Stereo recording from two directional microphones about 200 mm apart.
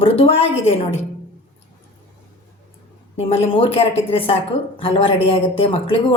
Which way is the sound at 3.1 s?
30° left (ahead or behind).